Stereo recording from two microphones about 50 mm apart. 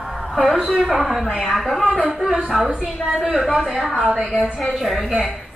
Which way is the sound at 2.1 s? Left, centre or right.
Centre.